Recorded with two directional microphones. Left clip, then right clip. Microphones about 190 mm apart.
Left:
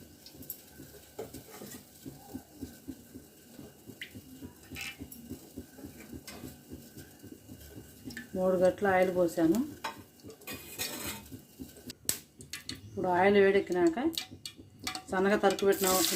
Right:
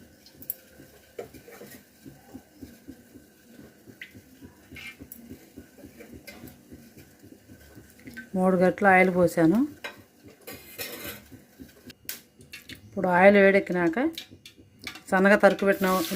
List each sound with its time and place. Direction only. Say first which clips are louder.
8.4 s speech: right 4 dB; 55° right (ahead or behind)
13.0 s speech: right 7 dB; 50° right (ahead or behind)
14.8 s stir: right 7 dB; 55° right (ahead or behind)